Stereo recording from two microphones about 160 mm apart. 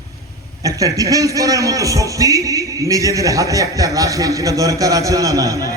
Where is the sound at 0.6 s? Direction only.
20° right (ahead or behind).